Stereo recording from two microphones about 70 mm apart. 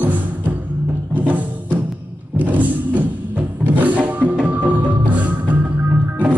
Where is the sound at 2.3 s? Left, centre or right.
Right.